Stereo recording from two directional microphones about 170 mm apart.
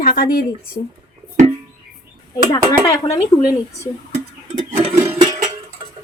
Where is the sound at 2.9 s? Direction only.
20° left (ahead or behind).